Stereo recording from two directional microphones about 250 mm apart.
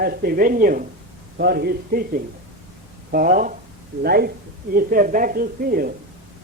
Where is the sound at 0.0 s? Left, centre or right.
Right.